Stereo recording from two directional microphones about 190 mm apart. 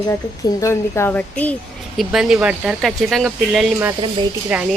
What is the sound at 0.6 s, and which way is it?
Speech, 15° left (ahead or behind).